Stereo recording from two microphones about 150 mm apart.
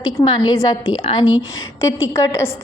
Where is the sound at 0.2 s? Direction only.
30° left (ahead or behind).